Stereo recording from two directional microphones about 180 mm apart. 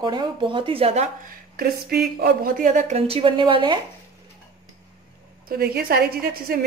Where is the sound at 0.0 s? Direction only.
25° right (ahead or behind).